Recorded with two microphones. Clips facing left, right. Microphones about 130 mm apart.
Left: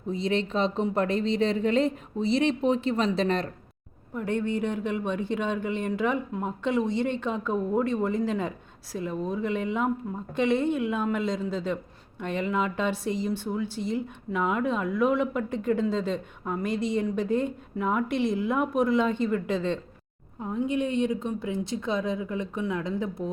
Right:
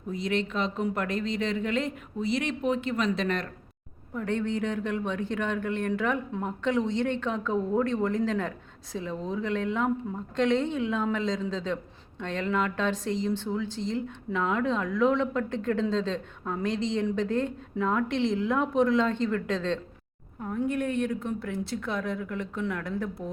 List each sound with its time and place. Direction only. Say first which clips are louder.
0.1 s speech: left 2 dB; 30° left (ahead or behind)
4.1 s a man's voice: left 1 dB; 10° left (ahead or behind)